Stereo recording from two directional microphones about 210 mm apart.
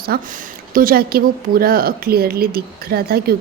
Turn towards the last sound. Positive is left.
turn(degrees=-45)  # may be behind; listen again after turning